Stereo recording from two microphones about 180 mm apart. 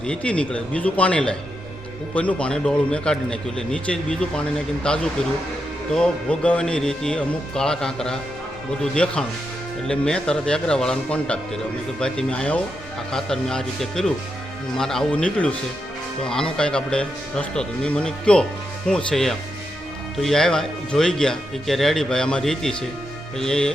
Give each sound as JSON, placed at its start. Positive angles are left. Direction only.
{"t": 0.0, "sound": "a man's voice", "side_deg": 5}